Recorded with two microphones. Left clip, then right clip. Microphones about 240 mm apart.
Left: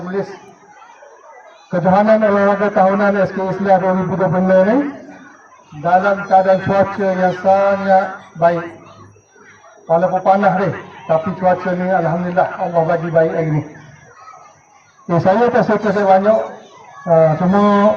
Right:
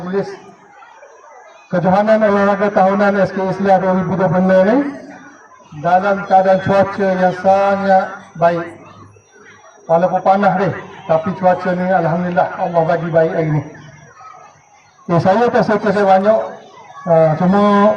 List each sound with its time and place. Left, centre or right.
1.7 s a man's voice: right
5.8 s a man's voice: right
9.8 s a man's voice: right
15.0 s a man's voice: right